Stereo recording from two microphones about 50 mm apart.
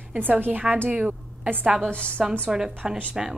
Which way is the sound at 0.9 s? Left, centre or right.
Centre.